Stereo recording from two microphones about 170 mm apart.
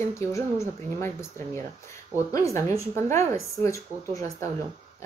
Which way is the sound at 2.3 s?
20° left (ahead or behind).